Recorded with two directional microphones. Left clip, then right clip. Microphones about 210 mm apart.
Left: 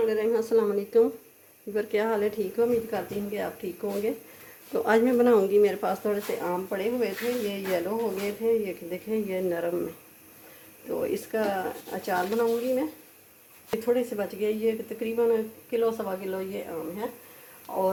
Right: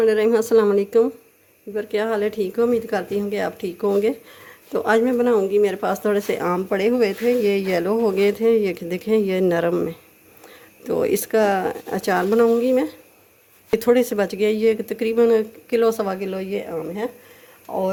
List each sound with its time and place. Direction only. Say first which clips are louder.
0.0 s speech: right 8 dB; 40° right (ahead or behind)
1.7 s speech: right 4 dB; 15° right (ahead or behind); by 2.6 s 30° right (ahead or behind)
2.9 s speech: right 8 dB; 50° right (ahead or behind)
4.7 s speech: right 4 dB; 20° right (ahead or behind)
6.4 s speech: right 8 dB; 50° right (ahead or behind)
10.8 s speech: right 9 dB; 55° right (ahead or behind)
17.7 s speech: right 5 dB; 55° right (ahead or behind)